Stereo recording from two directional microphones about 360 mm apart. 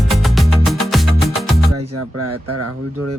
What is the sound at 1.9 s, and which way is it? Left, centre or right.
Speech, right.